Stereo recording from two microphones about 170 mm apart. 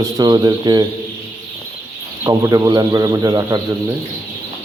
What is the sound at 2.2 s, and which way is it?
Speech, 20° right (ahead or behind).